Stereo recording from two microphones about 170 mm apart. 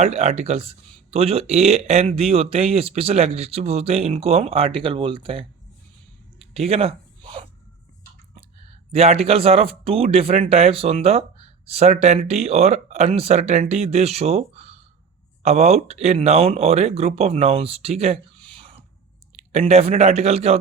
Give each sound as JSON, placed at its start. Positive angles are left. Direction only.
{"t": 0.0, "sound": "speech", "side_deg": -40}
{"t": 6.5, "sound": "a sound", "side_deg": -35}
{"t": 8.4, "sound": "speech", "side_deg": -35}